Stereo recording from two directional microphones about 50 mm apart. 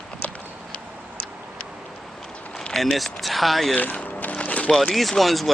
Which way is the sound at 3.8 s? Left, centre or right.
Left.